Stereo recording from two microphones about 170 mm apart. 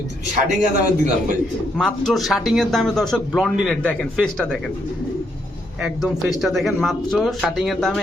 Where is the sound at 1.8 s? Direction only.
Centre (ahead or behind).